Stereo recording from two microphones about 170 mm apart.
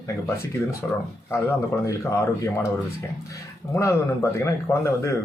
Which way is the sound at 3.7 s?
15° left (ahead or behind).